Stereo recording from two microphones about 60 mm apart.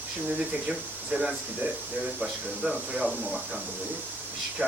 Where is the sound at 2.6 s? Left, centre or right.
Right.